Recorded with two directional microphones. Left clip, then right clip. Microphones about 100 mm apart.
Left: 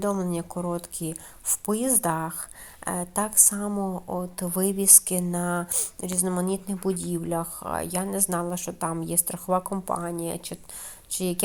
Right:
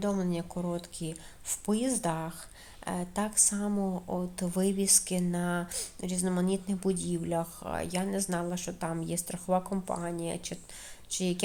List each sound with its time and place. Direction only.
0.0 s speech: 45° left (ahead or behind)